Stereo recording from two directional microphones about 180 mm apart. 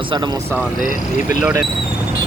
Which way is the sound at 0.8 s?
50° left (ahead or behind).